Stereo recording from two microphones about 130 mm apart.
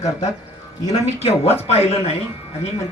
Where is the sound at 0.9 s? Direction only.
50° left (ahead or behind).